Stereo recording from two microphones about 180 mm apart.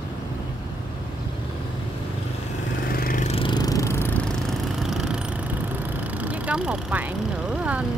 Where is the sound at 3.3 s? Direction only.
25° left (ahead or behind).